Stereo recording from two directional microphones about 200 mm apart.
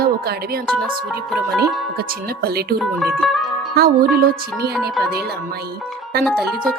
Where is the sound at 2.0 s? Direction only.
50° right (ahead or behind).